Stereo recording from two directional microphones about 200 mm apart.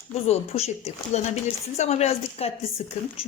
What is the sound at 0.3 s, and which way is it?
Speech, 30° left (ahead or behind).